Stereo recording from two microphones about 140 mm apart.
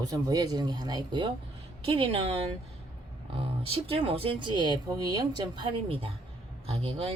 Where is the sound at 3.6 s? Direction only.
40° right (ahead or behind).